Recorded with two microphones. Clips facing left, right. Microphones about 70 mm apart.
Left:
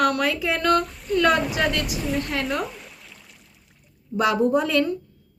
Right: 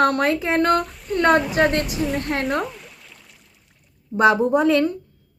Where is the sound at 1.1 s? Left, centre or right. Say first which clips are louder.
Right 3 dB; right.